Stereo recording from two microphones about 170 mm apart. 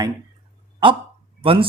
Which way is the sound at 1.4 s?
30° right (ahead or behind).